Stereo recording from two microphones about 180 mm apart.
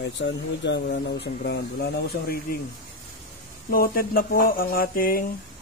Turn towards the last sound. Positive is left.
turn(degrees=55)  # may be behind; listen again after turning